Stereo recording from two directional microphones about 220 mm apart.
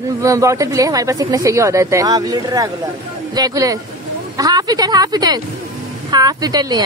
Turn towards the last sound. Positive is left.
turn(degrees=-15)  # may be behind; listen again after turning